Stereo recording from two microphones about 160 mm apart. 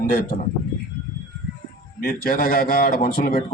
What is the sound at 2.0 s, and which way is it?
A man's voice, 65° left (ahead or behind).